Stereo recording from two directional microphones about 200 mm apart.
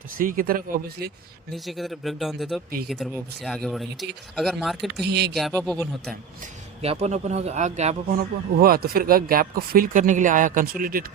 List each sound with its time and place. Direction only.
0.2 s speech: 45° right (ahead or behind)
1.5 s speech: centre (ahead or behind)
5.0 s speech: 55° right (ahead or behind)
5.3 s speech: centre (ahead or behind)
6.8 s speech: 35° right (ahead or behind)
8.5 s speech: 50° right (ahead or behind)